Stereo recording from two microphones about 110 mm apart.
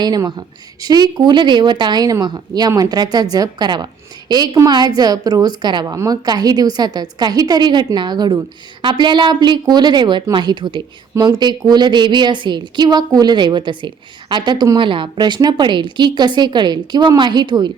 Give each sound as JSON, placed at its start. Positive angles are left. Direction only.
{"t": 0.0, "sound": "a woman's voice", "side_deg": -40}